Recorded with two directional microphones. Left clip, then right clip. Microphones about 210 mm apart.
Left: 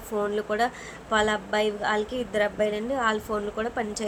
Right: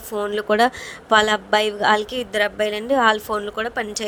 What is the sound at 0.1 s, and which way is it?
A woman's voice, 40° right (ahead or behind).